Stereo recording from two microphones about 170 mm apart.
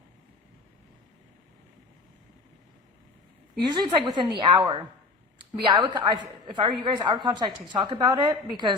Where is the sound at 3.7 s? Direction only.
25° right (ahead or behind).